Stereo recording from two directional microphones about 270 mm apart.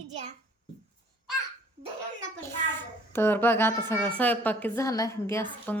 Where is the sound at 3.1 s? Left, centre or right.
Centre.